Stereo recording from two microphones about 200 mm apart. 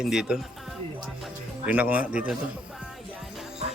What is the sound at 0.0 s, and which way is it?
Speech, 5° right (ahead or behind).